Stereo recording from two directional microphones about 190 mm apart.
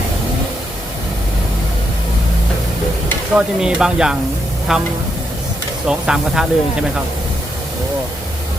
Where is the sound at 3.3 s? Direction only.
5° right (ahead or behind).